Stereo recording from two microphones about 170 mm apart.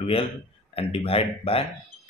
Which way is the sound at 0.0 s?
35° left (ahead or behind).